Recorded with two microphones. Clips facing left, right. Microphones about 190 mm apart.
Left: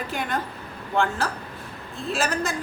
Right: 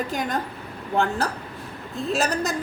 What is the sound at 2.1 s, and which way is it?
Speech, 40° right (ahead or behind).